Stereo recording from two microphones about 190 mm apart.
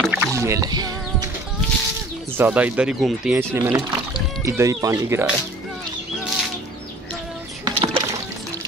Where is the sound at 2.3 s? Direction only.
10° right (ahead or behind).